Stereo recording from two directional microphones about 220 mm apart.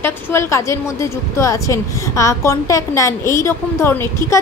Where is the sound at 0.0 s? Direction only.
10° left (ahead or behind).